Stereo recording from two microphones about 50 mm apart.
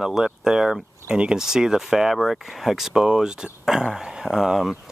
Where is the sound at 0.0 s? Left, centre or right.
Centre.